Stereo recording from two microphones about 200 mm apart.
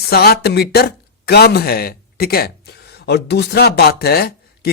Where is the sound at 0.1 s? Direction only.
50° left (ahead or behind).